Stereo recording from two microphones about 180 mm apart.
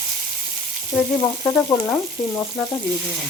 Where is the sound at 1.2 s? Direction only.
20° left (ahead or behind).